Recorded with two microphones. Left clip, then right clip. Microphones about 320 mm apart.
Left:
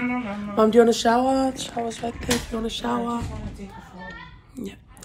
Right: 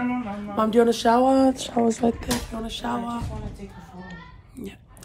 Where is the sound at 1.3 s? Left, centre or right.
Right.